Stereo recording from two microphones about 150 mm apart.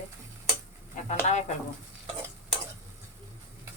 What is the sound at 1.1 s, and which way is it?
Speech, 50° left (ahead or behind).